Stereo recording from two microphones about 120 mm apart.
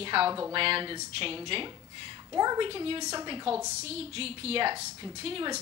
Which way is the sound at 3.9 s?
55° right (ahead or behind).